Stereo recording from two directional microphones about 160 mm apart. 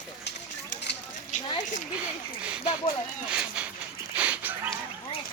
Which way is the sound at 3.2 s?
5° right (ahead or behind).